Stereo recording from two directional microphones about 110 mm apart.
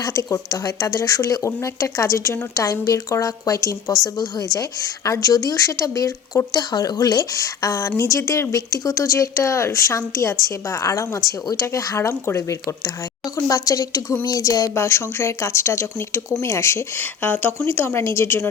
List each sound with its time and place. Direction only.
0.0 s speech: 30° left (ahead or behind)